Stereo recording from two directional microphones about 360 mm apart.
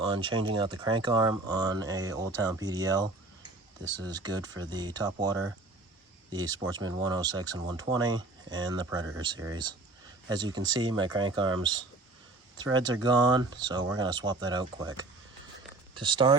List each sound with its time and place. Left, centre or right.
0.0 s speech: centre
6.3 s speech: centre